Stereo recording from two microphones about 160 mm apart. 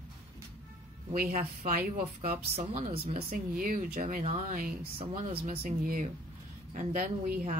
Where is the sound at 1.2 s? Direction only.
50° right (ahead or behind).